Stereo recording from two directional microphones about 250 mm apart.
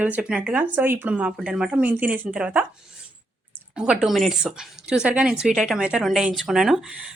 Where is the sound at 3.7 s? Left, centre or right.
Centre.